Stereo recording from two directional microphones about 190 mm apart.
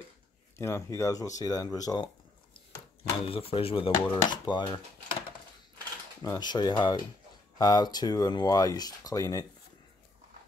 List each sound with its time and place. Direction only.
0.6 s speech: 15° left (ahead or behind)
3.0 s speech: 30° left (ahead or behind)
6.2 s speech: 20° left (ahead or behind)